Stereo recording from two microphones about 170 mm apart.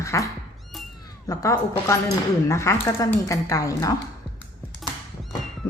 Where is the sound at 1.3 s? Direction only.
20° left (ahead or behind).